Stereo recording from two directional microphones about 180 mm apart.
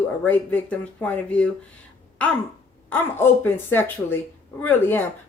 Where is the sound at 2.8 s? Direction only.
10° left (ahead or behind).